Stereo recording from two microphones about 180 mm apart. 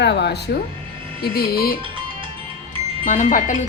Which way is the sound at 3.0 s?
45° left (ahead or behind).